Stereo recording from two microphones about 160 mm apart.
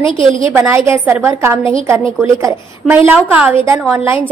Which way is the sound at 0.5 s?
15° right (ahead or behind).